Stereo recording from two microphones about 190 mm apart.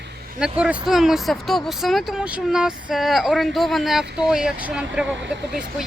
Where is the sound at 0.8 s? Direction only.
Centre (ahead or behind).